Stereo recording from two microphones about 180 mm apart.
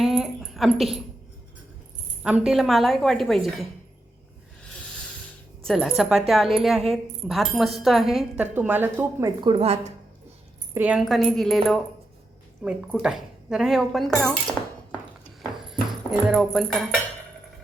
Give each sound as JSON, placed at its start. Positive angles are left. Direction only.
{"t": 0.0, "sound": "dog", "side_deg": 0}
{"t": 2.2, "sound": "speech", "side_deg": -5}
{"t": 5.6, "sound": "speech", "side_deg": 0}
{"t": 9.4, "sound": "a woman's voice", "side_deg": -30}
{"t": 10.8, "sound": "speech", "side_deg": -5}
{"t": 12.9, "sound": "speech", "side_deg": 0}
{"t": 15.4, "sound": "music", "side_deg": 0}